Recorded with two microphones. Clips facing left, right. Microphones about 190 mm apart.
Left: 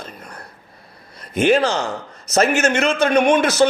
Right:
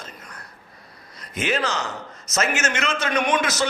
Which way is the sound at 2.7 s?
60° left (ahead or behind).